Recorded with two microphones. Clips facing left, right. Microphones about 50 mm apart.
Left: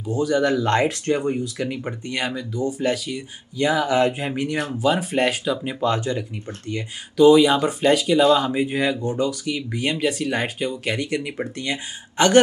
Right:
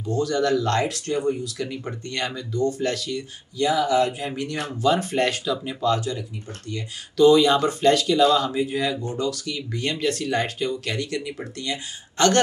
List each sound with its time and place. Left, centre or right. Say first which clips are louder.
0.0 s speech: left 2 dB; centre
1.8 s speech: left 2 dB; centre
3.5 s speech: left 1 dB; left
4.7 s speech: right 1 dB; centre
5.4 s speech: left 2 dB; left
7.2 s speech: left 2 dB; centre